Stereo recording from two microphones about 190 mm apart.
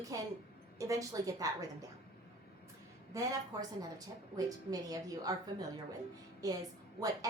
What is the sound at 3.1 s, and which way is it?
A woman's voice, 20° right (ahead or behind).